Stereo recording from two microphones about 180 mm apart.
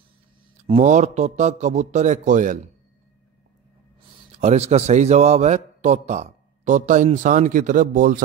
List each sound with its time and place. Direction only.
0.7 s a man's voice: 40° right (ahead or behind)
4.4 s a man's voice: 40° right (ahead or behind)